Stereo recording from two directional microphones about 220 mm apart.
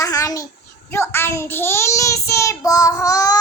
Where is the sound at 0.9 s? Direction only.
10° left (ahead or behind).